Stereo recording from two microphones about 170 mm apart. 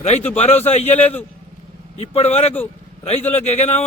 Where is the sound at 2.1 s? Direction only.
40° left (ahead or behind).